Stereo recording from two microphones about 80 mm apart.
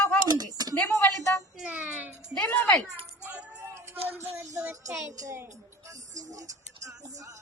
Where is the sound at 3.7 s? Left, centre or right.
Right.